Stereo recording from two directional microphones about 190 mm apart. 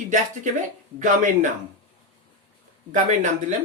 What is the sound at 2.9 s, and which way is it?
Speech, 40° right (ahead or behind).